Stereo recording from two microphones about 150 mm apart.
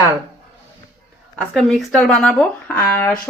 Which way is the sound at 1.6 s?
Centre (ahead or behind).